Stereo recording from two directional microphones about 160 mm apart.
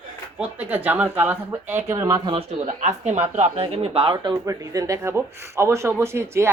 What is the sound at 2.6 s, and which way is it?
Speech, 45° right (ahead or behind).